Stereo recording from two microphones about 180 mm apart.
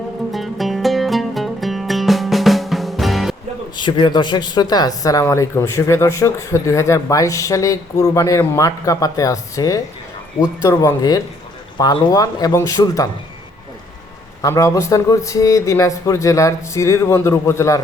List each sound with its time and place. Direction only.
0.3 s music: centre (ahead or behind)
3.8 s speech: 25° left (ahead or behind)
14.4 s speech: 15° left (ahead or behind)